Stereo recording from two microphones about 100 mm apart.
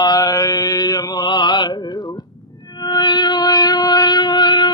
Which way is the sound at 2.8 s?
50° left (ahead or behind).